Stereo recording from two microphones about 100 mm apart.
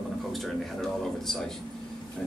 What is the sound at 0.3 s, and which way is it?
Speech, 5° left (ahead or behind).